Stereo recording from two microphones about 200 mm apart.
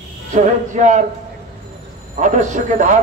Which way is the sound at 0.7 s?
40° right (ahead or behind).